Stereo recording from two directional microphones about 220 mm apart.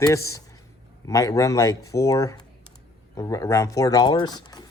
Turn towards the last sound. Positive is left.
turn(degrees=20)  # may be behind; listen again after turning